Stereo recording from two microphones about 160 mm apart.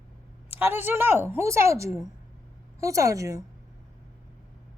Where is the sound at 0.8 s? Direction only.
15° right (ahead or behind).